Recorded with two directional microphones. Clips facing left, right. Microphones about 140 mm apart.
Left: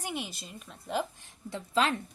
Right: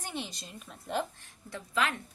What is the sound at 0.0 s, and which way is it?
A woman's voice, 10° left (ahead or behind).